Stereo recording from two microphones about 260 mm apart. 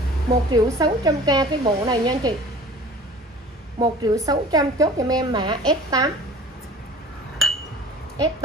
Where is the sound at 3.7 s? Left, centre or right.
Centre.